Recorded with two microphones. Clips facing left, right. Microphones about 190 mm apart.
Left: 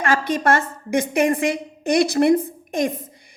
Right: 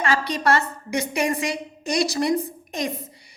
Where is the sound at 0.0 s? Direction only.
50° left (ahead or behind).